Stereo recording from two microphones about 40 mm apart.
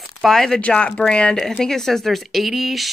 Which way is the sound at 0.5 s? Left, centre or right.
Left.